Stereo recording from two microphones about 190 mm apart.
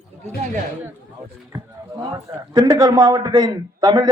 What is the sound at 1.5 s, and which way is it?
A man's voice, 20° right (ahead or behind).